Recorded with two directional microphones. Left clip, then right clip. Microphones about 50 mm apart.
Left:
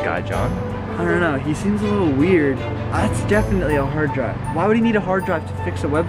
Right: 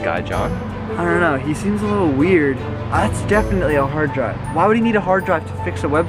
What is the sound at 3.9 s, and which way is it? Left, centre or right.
Speech, centre.